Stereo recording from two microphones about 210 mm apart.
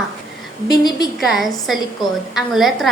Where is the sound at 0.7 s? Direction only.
20° left (ahead or behind).